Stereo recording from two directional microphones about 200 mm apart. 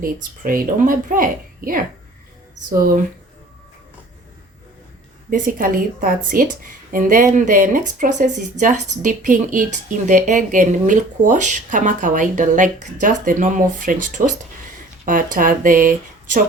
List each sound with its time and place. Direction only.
0.0 s speech: 45° right (ahead or behind)
5.3 s a woman's voice: 45° right (ahead or behind)